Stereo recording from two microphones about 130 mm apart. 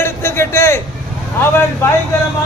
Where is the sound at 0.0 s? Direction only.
20° left (ahead or behind).